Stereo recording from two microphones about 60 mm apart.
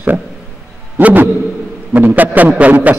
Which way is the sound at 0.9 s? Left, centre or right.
Right.